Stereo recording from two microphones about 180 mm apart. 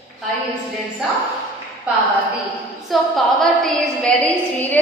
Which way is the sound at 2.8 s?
Centre (ahead or behind).